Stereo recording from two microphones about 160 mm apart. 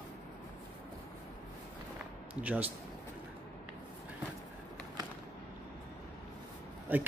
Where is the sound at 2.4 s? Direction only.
10° right (ahead or behind).